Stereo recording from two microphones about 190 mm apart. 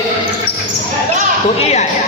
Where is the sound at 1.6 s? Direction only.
35° left (ahead or behind).